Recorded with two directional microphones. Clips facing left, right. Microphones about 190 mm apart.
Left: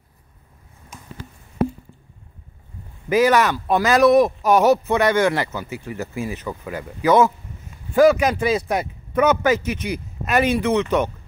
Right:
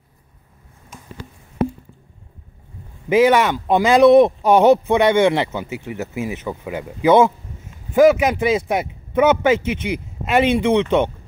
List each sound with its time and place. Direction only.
3.1 s speech: 25° right (ahead or behind)